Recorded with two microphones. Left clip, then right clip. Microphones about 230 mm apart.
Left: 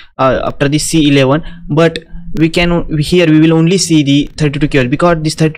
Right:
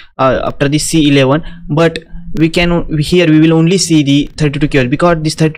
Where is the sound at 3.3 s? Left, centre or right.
Centre.